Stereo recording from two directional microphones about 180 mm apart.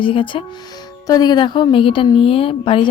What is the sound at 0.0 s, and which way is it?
Speech, 30° left (ahead or behind).